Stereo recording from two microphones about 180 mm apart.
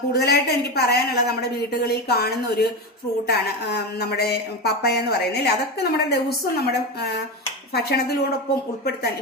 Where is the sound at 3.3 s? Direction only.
60° left (ahead or behind).